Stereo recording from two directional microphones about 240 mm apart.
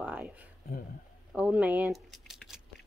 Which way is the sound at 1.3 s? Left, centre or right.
Centre.